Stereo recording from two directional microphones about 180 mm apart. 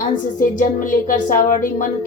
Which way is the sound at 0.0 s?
50° left (ahead or behind).